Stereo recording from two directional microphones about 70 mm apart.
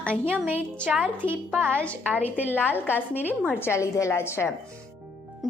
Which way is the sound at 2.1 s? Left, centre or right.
Right.